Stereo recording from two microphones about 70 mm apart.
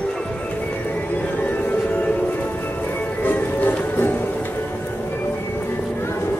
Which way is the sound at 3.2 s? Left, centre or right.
Left.